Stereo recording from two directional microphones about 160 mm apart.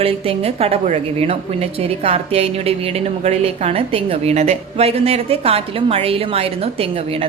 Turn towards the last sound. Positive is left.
turn(degrees=-40)  # may be behind; listen again after turning